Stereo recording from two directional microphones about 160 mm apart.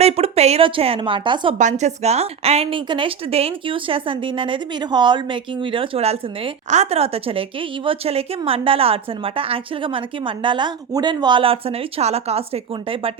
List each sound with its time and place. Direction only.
0.0 s a woman's voice: 40° right (ahead or behind)
1.5 s a woman's voice: 50° right (ahead or behind)